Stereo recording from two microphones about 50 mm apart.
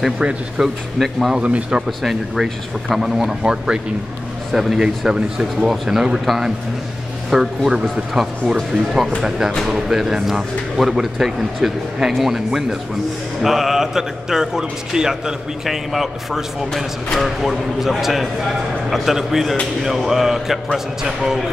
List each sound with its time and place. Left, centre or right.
0.6 s a man's voice: centre
0.9 s speech: centre
1.3 s speech: right
1.9 s a man's voice: centre
4.5 s a man's voice: centre
13.4 s a man's voice: centre